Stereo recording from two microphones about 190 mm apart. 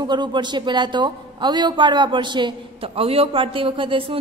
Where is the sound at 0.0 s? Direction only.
25° right (ahead or behind).